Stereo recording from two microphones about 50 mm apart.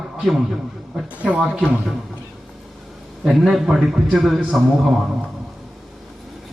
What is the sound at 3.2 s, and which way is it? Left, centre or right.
Speech, centre.